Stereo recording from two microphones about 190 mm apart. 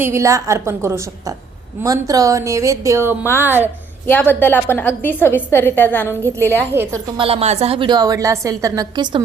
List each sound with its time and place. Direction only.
0.0 s speech: 15° right (ahead or behind)
4.0 s a woman's voice: 10° left (ahead or behind)
7.2 s a woman's voice: 30° right (ahead or behind)